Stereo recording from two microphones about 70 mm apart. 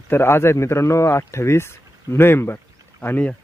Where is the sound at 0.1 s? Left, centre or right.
Left.